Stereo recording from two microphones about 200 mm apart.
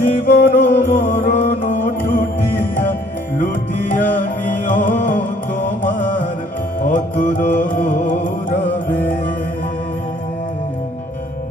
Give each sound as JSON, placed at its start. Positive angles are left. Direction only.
{"t": 0.0, "sound": "music", "side_deg": 45}
{"t": 3.9, "sound": "music", "side_deg": 40}